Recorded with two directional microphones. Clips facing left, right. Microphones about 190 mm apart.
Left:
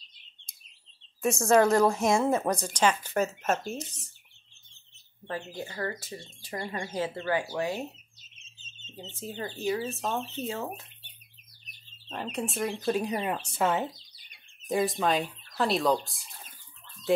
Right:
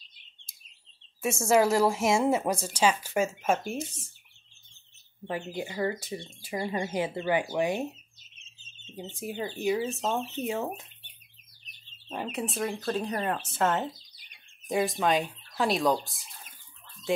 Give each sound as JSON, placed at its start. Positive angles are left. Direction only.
{"t": 1.4, "sound": "speech", "side_deg": -5}
{"t": 5.2, "sound": "speech", "side_deg": -15}
{"t": 12.1, "sound": "speech", "side_deg": -10}
{"t": 12.8, "sound": "speech", "side_deg": 10}